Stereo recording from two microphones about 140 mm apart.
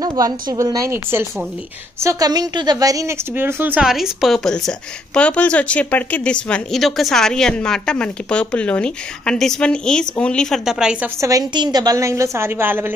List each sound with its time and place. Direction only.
0.0 s a woman's voice: 30° right (ahead or behind); by 11.1 s 5° right (ahead or behind)
11.1 s a woman's voice: 25° right (ahead or behind)